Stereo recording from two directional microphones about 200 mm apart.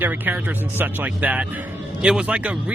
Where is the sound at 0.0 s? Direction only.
10° right (ahead or behind).